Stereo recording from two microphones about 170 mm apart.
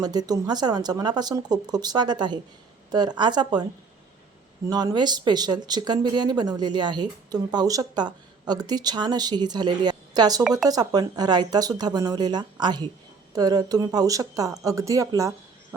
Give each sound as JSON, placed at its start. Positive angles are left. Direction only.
{"t": 0.0, "sound": "speech", "side_deg": -25}
{"t": 4.7, "sound": "speech", "side_deg": -25}